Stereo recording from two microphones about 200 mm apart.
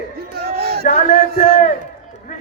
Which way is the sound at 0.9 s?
40° left (ahead or behind).